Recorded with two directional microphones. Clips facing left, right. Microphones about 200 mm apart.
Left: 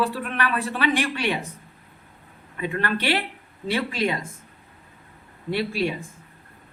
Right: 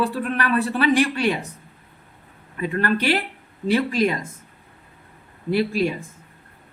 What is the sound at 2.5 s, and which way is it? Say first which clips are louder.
A woman's voice: right 4 dB; 40° right (ahead or behind).